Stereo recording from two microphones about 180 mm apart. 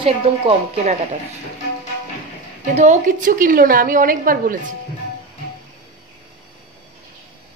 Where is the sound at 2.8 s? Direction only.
45° right (ahead or behind).